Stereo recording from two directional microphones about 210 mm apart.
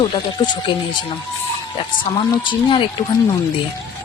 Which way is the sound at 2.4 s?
25° left (ahead or behind).